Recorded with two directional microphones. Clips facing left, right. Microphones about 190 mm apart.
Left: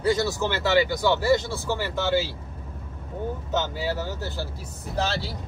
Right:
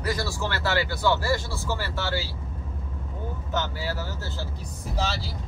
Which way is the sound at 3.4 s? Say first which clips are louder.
Left 2 dB; 20° left (ahead or behind).